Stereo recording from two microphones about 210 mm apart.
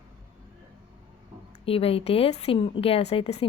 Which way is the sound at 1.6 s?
25° left (ahead or behind).